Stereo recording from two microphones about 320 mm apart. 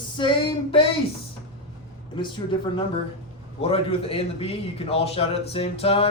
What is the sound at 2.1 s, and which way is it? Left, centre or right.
A man's voice, centre.